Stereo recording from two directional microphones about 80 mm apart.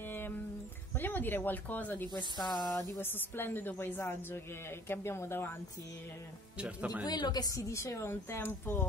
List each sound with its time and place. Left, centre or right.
0.0 s a sound: left
0.9 s a woman's voice: left
2.1 s a woman's voice: left
2.7 s a sound: left
3.0 s a woman's voice: left
6.6 s speech: centre
7.1 s a woman's voice: left
7.5 s a woman's voice: left